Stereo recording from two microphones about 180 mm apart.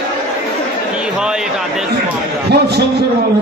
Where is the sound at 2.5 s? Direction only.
65° right (ahead or behind).